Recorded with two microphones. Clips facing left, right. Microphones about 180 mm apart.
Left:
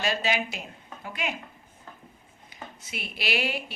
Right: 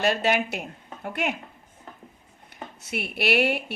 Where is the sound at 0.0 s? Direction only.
60° right (ahead or behind).